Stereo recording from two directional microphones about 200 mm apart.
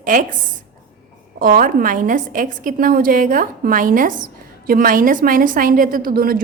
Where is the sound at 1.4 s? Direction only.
45° right (ahead or behind).